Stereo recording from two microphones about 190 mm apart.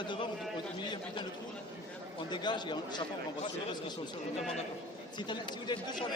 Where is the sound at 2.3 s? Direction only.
25° left (ahead or behind).